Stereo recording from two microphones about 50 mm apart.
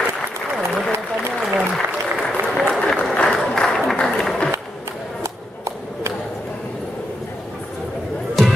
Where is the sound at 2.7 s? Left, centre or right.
Centre.